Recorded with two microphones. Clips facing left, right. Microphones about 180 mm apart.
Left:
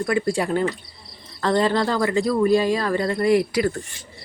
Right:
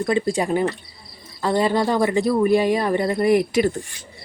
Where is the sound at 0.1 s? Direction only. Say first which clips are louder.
Right 1 dB; 20° right (ahead or behind).